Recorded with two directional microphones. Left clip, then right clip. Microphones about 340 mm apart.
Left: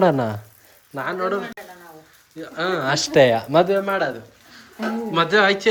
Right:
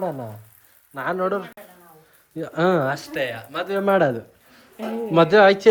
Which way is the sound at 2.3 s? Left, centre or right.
Centre.